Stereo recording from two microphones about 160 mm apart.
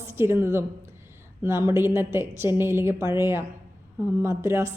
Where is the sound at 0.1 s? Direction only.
15° right (ahead or behind).